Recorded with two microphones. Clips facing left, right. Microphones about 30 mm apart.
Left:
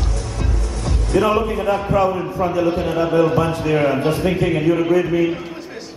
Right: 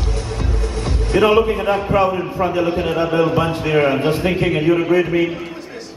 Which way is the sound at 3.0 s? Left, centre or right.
Right.